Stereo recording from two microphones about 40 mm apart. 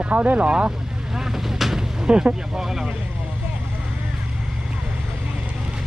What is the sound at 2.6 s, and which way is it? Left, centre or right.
Speech, centre.